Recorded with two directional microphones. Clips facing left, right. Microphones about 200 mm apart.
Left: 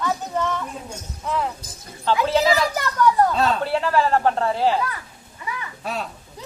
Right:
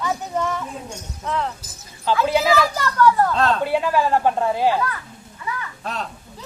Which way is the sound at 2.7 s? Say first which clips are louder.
Right 1 dB; 15° left (ahead or behind).